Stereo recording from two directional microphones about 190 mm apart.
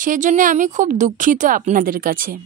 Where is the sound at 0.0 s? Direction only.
45° right (ahead or behind).